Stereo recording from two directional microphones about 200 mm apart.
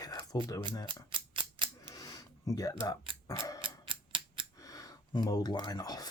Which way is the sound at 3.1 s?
25° right (ahead or behind).